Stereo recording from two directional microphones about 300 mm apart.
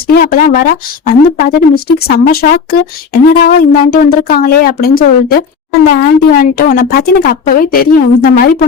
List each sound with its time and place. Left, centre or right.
0.1 s speech: left